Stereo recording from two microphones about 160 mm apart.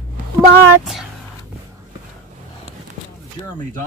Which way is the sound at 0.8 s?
Centre (ahead or behind).